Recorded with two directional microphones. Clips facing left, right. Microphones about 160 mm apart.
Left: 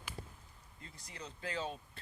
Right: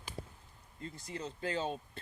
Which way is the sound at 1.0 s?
25° right (ahead or behind).